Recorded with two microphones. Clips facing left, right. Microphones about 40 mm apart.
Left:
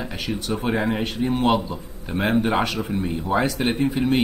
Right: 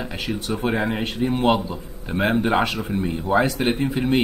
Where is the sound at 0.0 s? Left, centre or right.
Centre.